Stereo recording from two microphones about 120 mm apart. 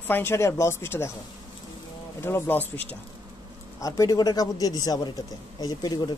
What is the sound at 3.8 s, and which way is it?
A man's voice, 30° left (ahead or behind).